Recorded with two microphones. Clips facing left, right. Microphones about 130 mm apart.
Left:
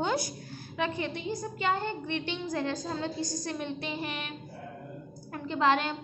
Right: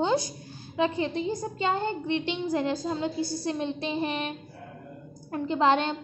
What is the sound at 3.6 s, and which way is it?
A woman's voice, 25° right (ahead or behind).